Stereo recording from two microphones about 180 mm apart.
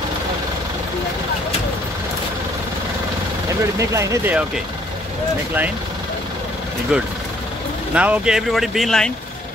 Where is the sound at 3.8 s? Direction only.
15° right (ahead or behind).